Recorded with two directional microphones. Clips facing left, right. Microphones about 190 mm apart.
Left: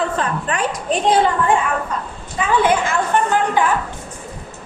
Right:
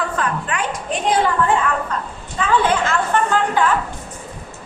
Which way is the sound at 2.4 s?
10° left (ahead or behind).